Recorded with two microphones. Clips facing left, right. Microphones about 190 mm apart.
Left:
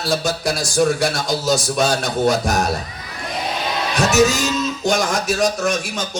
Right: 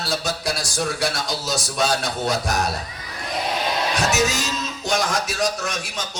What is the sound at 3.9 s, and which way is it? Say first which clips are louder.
Music: left 9 dB; 45° left (ahead or behind).